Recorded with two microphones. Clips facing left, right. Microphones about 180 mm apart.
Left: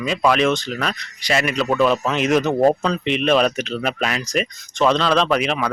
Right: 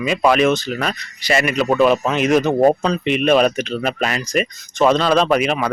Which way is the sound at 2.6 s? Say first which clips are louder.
Right 1 dB; 15° right (ahead or behind).